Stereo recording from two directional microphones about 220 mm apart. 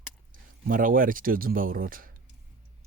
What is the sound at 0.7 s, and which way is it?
Speech, 40° right (ahead or behind).